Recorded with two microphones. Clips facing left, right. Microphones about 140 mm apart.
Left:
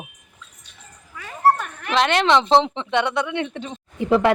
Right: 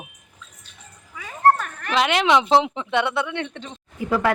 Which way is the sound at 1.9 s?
5° right (ahead or behind).